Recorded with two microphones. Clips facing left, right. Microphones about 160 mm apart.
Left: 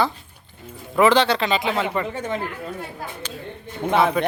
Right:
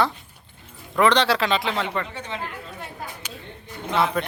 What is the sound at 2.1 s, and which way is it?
Speech, 45° left (ahead or behind).